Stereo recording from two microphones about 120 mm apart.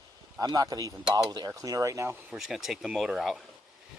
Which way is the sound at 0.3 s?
30° right (ahead or behind).